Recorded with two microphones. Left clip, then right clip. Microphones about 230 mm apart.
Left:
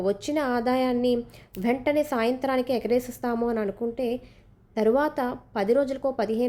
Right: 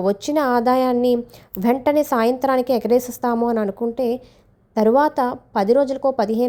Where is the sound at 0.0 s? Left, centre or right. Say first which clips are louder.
Right 7 dB; right.